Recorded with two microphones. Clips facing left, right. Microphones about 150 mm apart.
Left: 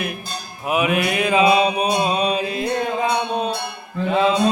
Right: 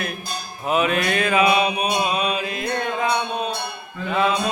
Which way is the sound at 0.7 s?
10° left (ahead or behind).